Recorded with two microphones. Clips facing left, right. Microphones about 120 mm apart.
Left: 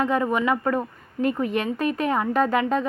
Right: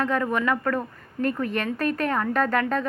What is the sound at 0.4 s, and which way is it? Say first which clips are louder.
A woman's voice: left 2 dB; 15° left (ahead or behind).